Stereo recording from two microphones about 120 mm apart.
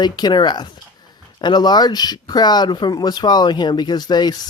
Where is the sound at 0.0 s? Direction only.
35° left (ahead or behind).